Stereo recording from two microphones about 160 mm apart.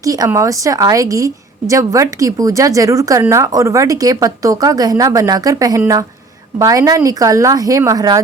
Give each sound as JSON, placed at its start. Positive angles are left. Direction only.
{"t": 0.0, "sound": "a woman's voice", "side_deg": -20}